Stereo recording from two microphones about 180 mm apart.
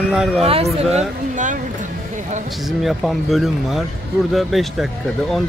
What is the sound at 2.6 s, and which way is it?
Speech, centre (ahead or behind).